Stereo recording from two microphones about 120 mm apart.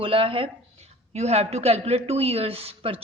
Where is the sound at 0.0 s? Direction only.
50° right (ahead or behind).